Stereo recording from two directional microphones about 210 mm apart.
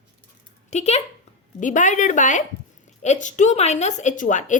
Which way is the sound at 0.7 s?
30° left (ahead or behind).